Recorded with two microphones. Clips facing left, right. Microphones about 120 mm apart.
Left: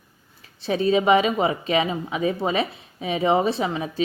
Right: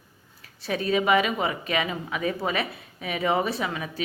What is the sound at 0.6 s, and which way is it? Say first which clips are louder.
A woman's voice: left 5 dB; 25° left (ahead or behind).